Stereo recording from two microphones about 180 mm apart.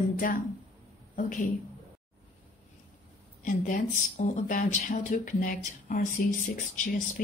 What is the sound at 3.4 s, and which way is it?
Speech, 45° left (ahead or behind).